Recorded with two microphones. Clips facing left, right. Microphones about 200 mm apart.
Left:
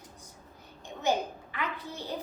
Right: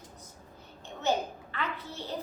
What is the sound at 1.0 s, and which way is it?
A child's voice, 15° left (ahead or behind).